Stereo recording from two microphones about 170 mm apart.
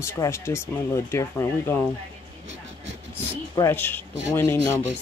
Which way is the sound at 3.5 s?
15° left (ahead or behind).